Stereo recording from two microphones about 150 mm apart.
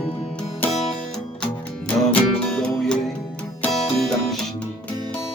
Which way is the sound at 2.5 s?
5° left (ahead or behind).